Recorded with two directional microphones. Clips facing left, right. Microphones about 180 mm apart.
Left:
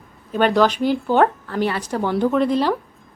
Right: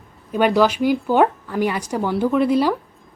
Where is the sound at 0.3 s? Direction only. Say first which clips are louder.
Even; 10° right (ahead or behind).